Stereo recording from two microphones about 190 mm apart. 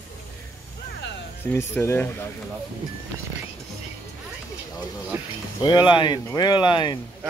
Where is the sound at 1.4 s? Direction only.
10° left (ahead or behind).